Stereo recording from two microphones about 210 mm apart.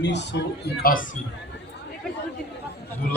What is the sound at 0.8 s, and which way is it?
Speech, 45° left (ahead or behind).